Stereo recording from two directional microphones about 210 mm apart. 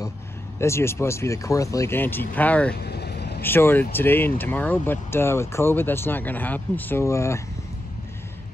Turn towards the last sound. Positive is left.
turn(degrees=15)  # may be behind; listen again after turning